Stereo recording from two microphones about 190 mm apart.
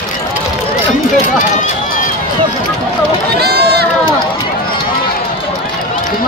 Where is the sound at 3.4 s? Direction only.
55° right (ahead or behind).